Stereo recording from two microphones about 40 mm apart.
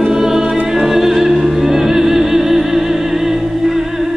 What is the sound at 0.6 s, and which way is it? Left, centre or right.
Opera, centre.